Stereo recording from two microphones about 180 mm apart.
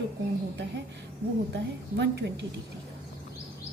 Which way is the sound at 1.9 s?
70° right (ahead or behind).